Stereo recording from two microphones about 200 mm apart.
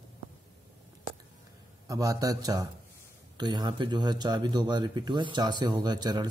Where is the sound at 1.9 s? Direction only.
20° right (ahead or behind).